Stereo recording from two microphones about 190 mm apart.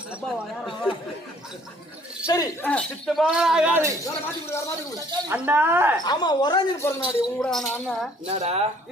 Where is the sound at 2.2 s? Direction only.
20° left (ahead or behind).